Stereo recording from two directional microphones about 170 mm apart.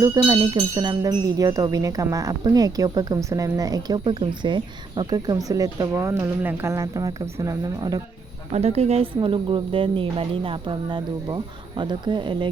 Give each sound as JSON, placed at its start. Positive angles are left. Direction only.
{"t": 0.0, "sound": "speech", "side_deg": -20}
{"t": 8.5, "sound": "speech", "side_deg": -40}